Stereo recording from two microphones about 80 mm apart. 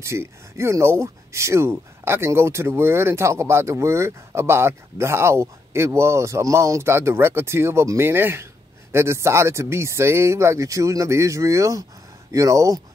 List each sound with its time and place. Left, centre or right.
0.0 s speech: right